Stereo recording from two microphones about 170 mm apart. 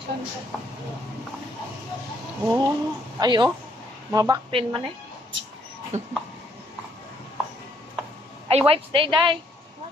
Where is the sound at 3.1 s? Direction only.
25° right (ahead or behind).